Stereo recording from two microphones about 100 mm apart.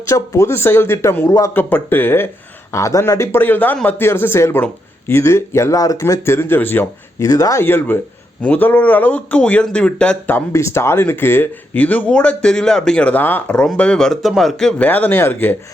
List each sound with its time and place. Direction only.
0.1 s speech: 25° left (ahead or behind)
7.3 s speech: 35° left (ahead or behind); by 10.3 s 10° left (ahead or behind)
10.3 s speech: 25° left (ahead or behind); by 14.8 s 5° left (ahead or behind)
14.8 s speech: 20° left (ahead or behind)